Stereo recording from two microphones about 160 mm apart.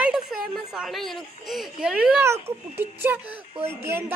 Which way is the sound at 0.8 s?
Centre (ahead or behind).